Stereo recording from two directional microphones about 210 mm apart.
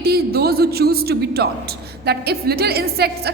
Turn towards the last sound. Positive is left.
turn(degrees=-50)  # may be behind; listen again after turning